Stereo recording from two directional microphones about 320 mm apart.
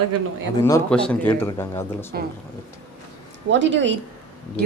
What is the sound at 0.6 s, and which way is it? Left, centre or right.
Speech, centre.